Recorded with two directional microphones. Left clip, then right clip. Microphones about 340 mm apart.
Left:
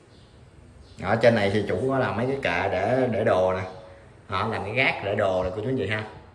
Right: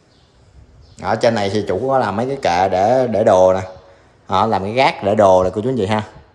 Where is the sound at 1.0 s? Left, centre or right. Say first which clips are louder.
Right 4 dB; centre.